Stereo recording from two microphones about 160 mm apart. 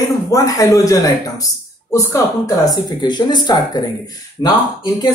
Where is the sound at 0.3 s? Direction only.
20° left (ahead or behind).